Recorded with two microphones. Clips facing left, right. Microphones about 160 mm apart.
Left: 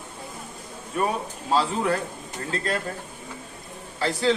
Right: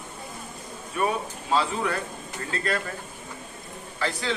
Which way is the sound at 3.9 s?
35° left (ahead or behind).